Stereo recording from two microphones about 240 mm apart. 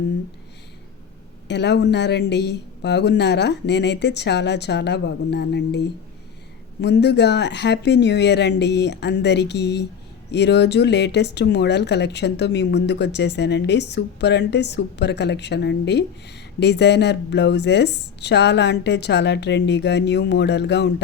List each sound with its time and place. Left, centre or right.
1.5 s speech: left